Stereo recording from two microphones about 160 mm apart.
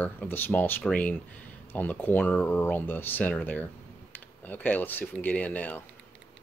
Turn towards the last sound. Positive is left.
turn(degrees=10)  # may be behind; listen again after turning